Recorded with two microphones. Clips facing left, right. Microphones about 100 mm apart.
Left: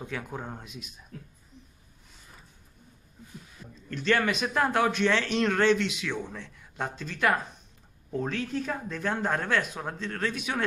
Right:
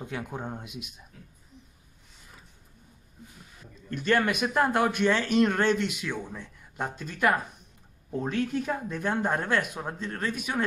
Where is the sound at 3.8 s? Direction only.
10° right (ahead or behind).